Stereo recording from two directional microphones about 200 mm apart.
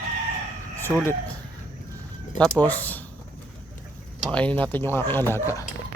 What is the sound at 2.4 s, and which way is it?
Speech, 10° left (ahead or behind).